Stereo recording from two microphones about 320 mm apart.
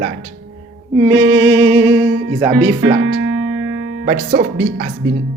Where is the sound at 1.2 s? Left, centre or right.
Right.